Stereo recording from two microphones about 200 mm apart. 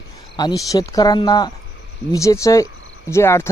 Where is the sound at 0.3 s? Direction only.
20° left (ahead or behind).